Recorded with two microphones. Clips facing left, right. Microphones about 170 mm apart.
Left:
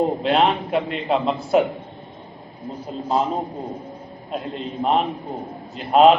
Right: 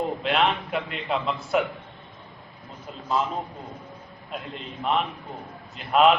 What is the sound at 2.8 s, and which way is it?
A man's voice, 35° left (ahead or behind).